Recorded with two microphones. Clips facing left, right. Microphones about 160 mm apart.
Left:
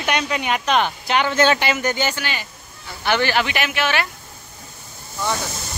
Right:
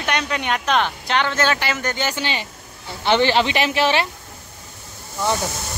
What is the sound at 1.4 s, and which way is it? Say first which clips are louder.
Speech: left 3 dB; 20° left (ahead or behind).